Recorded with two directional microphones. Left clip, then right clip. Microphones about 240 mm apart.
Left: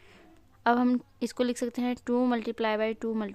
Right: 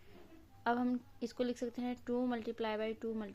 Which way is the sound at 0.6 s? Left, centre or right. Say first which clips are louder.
Left 10 dB; left.